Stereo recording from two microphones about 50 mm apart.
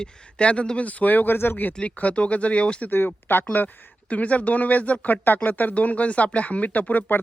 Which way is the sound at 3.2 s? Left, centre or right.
Left.